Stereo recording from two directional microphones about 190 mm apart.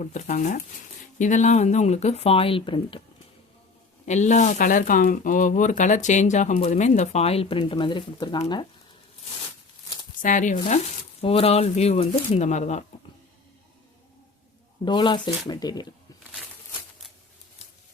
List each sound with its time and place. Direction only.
0.0 s speech: 40° left (ahead or behind)
4.0 s speech: 40° left (ahead or behind)
10.2 s speech: 45° left (ahead or behind)
11.2 s speech: 30° left (ahead or behind)
14.8 s speech: 25° left (ahead or behind)